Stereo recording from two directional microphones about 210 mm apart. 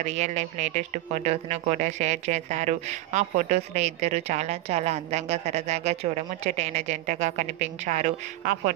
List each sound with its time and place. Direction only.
0.0 s speech: 35° right (ahead or behind)